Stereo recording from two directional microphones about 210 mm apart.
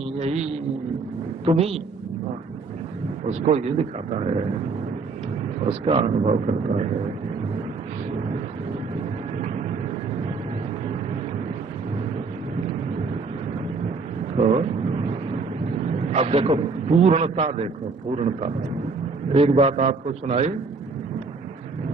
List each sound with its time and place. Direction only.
0.2 s speech: 30° right (ahead or behind)
1.5 s a man's voice: 30° right (ahead or behind)
3.2 s speech: 30° right (ahead or behind)
5.6 s speech: 25° right (ahead or behind)
14.3 s vehicle: 30° right (ahead or behind)
15.8 s a man's voice: 35° right (ahead or behind)